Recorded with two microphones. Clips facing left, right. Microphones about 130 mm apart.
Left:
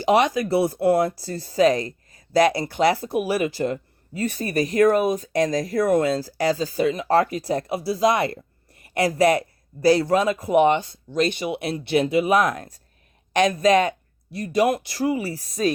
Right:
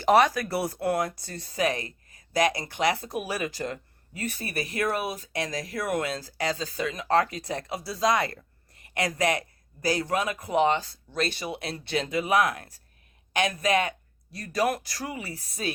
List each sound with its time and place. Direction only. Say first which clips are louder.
0.3 s speech: left 8 dB; 25° left (ahead or behind)
4.2 s speech: left 9 dB; 40° left (ahead or behind)
14.3 s speech: left 6 dB; 25° left (ahead or behind)